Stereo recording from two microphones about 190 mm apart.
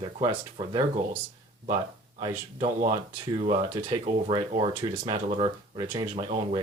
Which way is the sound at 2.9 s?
30° right (ahead or behind).